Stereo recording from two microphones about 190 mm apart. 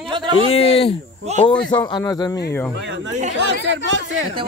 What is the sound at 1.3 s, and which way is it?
Speech, 35° right (ahead or behind).